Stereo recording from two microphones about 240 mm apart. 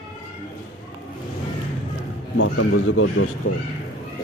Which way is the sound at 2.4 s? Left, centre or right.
Left.